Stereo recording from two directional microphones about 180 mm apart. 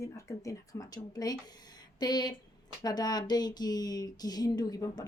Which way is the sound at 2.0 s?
25° left (ahead or behind).